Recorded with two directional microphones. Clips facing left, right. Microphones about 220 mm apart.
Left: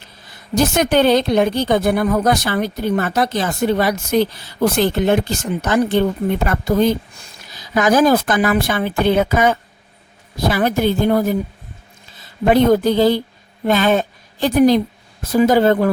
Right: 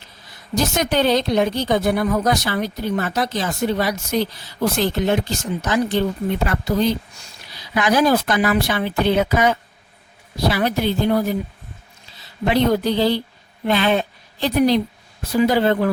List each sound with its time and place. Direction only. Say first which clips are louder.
0.5 s a woman's voice: left 5 dB; 55° left (ahead or behind)